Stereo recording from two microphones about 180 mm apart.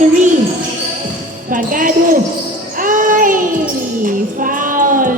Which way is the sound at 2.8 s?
50° right (ahead or behind).